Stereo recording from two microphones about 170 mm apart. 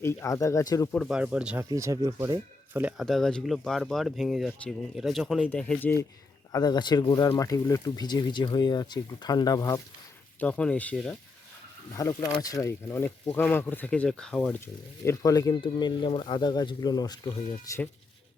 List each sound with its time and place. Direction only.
0.0 s speech: 15° left (ahead or behind)
0.9 s speech: 5° right (ahead or behind)
1.7 s speech: 20° right (ahead or behind)
3.0 s speech: centre (ahead or behind)
6.5 s speech: 25° left (ahead or behind)
10.4 s speech: 5° left (ahead or behind)
11.9 s speech: 20° left (ahead or behind)